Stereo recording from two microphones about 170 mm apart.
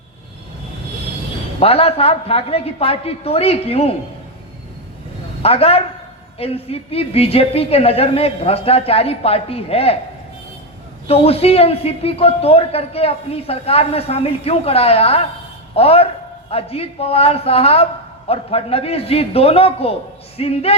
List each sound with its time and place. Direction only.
1.5 s a man's voice: 35° left (ahead or behind)
5.4 s a man's voice: 35° left (ahead or behind)
11.1 s a man's voice: 35° left (ahead or behind)